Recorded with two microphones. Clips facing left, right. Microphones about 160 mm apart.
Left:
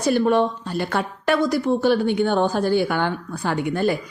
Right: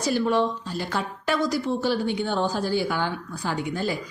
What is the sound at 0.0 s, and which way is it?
Speech, 55° left (ahead or behind).